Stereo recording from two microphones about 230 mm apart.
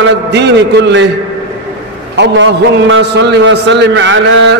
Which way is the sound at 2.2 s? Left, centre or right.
Right.